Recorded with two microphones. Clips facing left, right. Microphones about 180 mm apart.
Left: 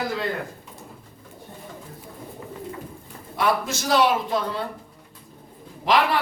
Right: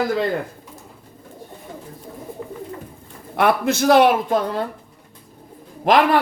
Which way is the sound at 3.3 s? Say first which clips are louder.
Right 6 dB; 60° right (ahead or behind).